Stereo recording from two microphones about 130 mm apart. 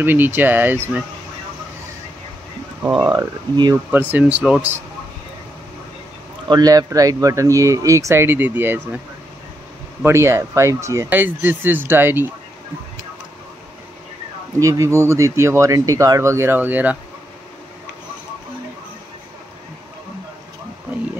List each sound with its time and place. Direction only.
0.0 s speech: 15° right (ahead or behind)
3.1 s speech: 30° right (ahead or behind)
4.1 s speech: 10° right (ahead or behind)
6.5 s speech: 30° right (ahead or behind)
10.0 s speech: 20° right (ahead or behind)
14.6 s speech: 25° right (ahead or behind)